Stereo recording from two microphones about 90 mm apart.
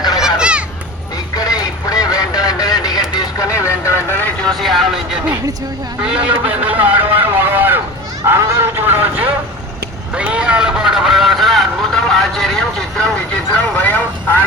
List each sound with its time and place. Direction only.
0.2 s children playing: 10° right (ahead or behind)
1.4 s quack: 45° left (ahead or behind)
3.2 s vehicle: 35° left (ahead or behind)
4.4 s a sound: centre (ahead or behind)
6.0 s a man's voice: 10° right (ahead or behind)
7.2 s a sound: 20° right (ahead or behind)
10.2 s vehicle: 10° right (ahead or behind); by 13.1 s 5° left (ahead or behind)
13.6 s vehicle: 20° left (ahead or behind)